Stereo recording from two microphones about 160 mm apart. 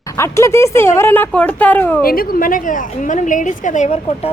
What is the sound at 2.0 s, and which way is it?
A woman's voice, 65° left (ahead or behind).